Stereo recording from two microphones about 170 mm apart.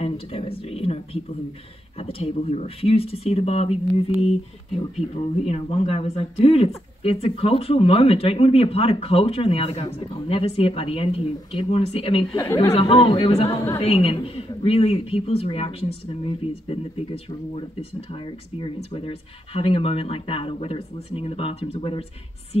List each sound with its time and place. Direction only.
0.0 s a sound: 35° left (ahead or behind)
2.0 s speech: 35° left (ahead or behind)
18.1 s speech: 30° left (ahead or behind)